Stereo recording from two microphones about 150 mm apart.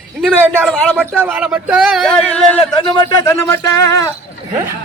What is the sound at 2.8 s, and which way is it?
A man's voice, 30° left (ahead or behind).